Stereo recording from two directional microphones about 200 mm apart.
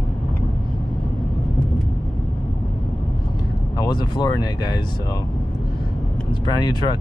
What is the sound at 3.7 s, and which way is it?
Speech, 20° left (ahead or behind).